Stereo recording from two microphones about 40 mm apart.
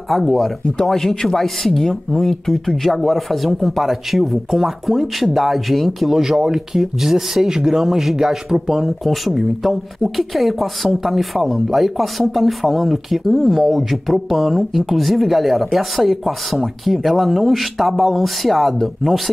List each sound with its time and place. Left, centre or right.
0.1 s speech: centre
8.8 s speech: centre